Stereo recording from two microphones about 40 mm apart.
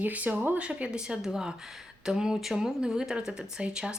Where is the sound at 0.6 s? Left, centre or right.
Right; by 1.5 s centre.